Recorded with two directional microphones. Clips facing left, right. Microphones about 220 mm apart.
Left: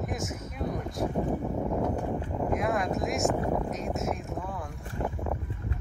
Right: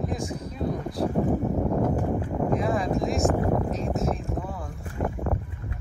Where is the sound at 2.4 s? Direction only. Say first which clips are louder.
Right 3 dB; centre (ahead or behind).